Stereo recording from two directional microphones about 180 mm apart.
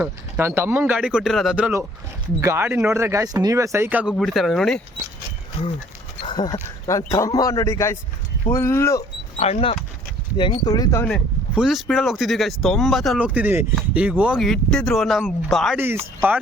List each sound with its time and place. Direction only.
0.0 s speech: 10° right (ahead or behind)
6.2 s a man's voice: 25° left (ahead or behind)
9.4 s speech: 35° left (ahead or behind)
11.5 s speech: centre (ahead or behind)